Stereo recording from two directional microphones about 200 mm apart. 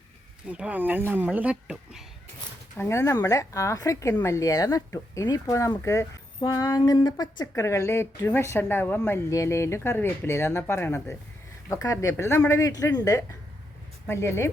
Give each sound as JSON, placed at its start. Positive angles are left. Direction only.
{"t": 0.4, "sound": "speech", "side_deg": -5}
{"t": 2.7, "sound": "speech", "side_deg": 15}